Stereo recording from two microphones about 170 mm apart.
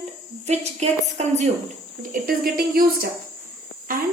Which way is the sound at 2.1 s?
60° right (ahead or behind).